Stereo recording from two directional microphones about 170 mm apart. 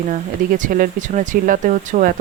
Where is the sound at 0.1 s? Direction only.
50° right (ahead or behind).